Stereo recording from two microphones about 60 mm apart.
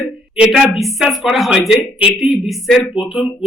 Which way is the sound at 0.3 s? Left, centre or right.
Centre.